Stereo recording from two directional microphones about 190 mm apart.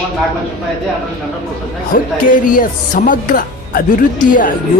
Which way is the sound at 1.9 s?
45° left (ahead or behind).